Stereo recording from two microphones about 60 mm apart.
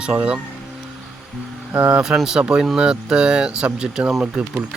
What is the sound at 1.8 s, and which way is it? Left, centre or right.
Speech, centre.